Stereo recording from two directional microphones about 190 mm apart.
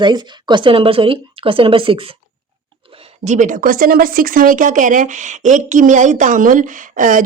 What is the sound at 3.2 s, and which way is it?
Speech, 40° right (ahead or behind).